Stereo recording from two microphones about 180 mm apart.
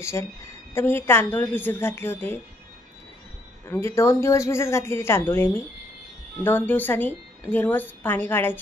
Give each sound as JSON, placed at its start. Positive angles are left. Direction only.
{"t": 0.0, "sound": "a woman's voice", "side_deg": 15}
{"t": 3.6, "sound": "a woman's voice", "side_deg": 15}